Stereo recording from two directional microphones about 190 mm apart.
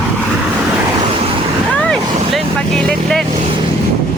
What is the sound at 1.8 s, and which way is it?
Vehicle, centre (ahead or behind).